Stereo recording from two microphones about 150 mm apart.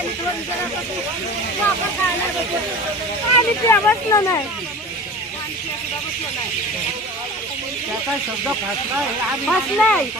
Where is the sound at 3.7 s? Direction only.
20° left (ahead or behind).